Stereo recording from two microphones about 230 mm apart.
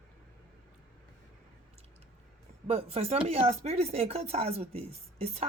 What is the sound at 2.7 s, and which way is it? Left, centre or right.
Speech, right.